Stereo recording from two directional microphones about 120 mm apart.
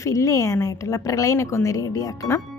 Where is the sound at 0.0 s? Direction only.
25° left (ahead or behind).